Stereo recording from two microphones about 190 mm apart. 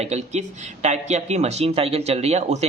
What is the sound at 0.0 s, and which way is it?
Speech, 35° right (ahead or behind).